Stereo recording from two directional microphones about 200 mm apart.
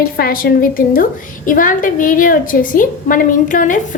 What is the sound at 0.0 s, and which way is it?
A woman's voice, 45° left (ahead or behind).